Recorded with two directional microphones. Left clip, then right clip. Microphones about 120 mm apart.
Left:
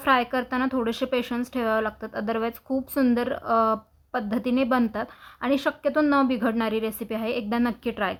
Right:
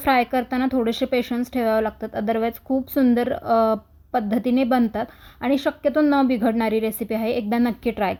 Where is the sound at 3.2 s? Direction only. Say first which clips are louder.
Right 3 dB; 35° right (ahead or behind).